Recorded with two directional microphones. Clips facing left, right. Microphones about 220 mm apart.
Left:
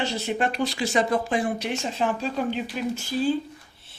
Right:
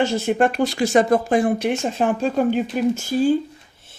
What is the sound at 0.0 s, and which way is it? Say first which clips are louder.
Speech: right 7 dB; 50° right (ahead or behind).